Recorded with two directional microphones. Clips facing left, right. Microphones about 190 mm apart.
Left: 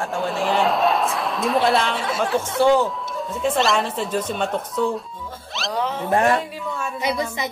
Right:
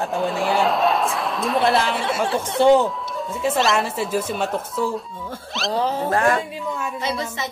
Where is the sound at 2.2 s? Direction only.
20° right (ahead or behind).